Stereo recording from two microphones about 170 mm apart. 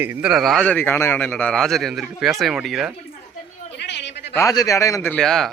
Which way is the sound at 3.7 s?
90° left.